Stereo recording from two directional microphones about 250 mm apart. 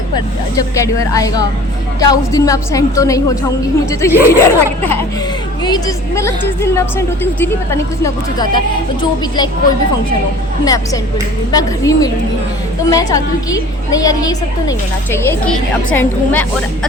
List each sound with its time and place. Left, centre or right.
0.5 s speech: centre
11.5 s speech: centre